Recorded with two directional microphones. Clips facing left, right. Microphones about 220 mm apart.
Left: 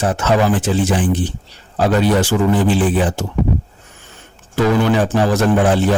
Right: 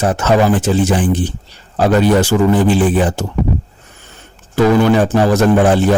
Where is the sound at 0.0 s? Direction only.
45° right (ahead or behind).